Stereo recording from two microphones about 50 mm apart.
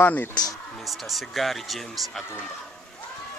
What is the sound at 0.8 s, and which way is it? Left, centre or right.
Speech, centre.